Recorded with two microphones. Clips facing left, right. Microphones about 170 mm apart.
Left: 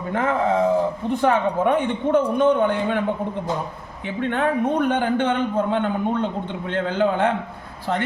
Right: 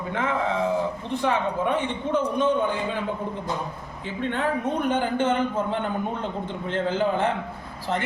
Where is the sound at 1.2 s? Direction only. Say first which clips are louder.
Left 5 dB; 50° left (ahead or behind).